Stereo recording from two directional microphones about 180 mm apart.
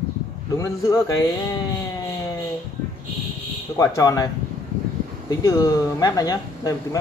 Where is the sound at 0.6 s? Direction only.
15° left (ahead or behind).